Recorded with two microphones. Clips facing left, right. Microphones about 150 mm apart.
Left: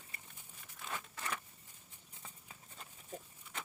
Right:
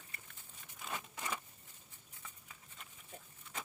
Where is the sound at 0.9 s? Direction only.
10° right (ahead or behind).